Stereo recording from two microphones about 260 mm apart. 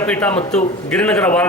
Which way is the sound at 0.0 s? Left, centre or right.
Centre.